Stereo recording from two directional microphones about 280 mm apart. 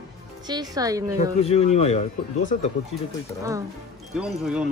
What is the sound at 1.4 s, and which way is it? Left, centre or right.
Speech, left.